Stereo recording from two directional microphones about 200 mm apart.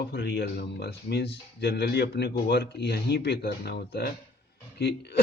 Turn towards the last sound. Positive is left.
turn(degrees=55)  # may be behind; listen again after turning